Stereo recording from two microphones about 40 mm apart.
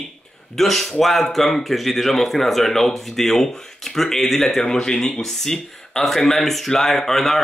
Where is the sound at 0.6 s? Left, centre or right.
Centre.